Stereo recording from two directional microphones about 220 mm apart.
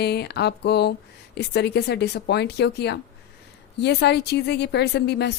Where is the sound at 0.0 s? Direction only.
50° left (ahead or behind).